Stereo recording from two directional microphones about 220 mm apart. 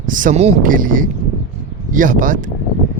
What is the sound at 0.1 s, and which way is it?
Speech, 35° right (ahead or behind).